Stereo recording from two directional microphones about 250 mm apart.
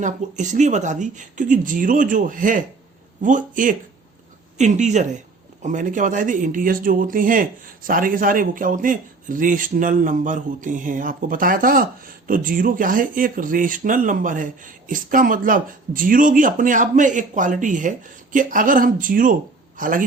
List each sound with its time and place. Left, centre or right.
0.0 s a man's voice: right